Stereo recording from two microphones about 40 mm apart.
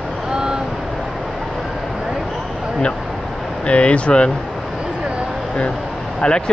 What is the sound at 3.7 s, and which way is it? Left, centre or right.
Speech, left.